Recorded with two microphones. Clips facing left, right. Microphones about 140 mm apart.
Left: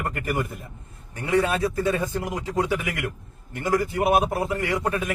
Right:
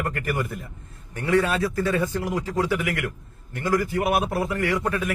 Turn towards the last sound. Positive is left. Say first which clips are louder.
# right 1 dB
turn(degrees=20)  # may be behind; listen again after turning